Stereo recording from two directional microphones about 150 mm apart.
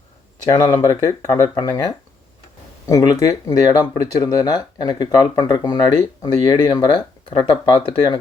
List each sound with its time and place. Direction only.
0.4 s speech: 30° left (ahead or behind)